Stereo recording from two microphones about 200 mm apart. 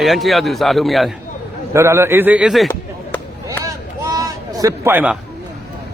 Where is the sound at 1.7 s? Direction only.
15° right (ahead or behind).